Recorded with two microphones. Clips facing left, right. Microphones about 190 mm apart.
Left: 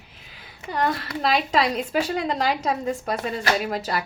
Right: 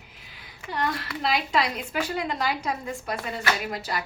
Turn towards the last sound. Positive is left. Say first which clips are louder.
# left 5 dB
turn(degrees=35)  # may be behind; listen again after turning